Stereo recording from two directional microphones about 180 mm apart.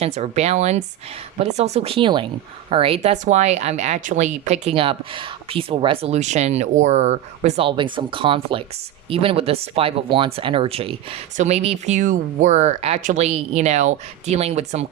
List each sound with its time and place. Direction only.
0.0 s speech: 35° right (ahead or behind)